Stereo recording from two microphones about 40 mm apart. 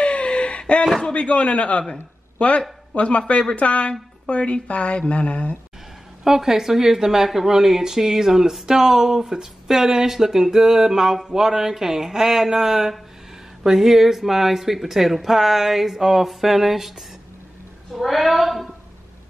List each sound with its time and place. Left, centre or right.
0.0 s a sound: left
1.1 s a woman's voice: left
6.2 s speech: centre
17.9 s speech: centre